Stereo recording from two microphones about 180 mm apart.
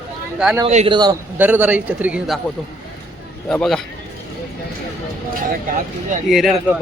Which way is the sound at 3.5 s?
5° left (ahead or behind).